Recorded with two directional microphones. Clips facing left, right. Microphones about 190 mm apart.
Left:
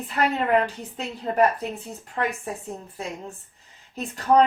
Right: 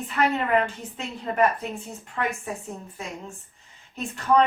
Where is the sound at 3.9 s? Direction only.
35° left (ahead or behind).